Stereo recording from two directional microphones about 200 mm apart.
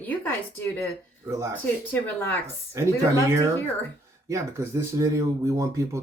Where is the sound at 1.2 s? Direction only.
15° right (ahead or behind).